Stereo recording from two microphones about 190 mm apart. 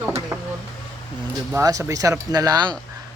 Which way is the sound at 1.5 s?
15° right (ahead or behind).